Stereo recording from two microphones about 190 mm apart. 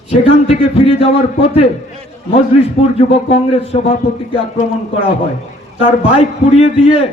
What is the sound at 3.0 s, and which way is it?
Speech, 30° left (ahead or behind).